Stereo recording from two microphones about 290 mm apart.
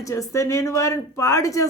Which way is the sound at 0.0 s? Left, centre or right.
Centre.